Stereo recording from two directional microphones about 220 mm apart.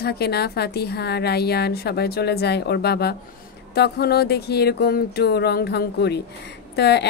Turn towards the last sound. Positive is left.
turn(degrees=50)  # may be behind; listen again after turning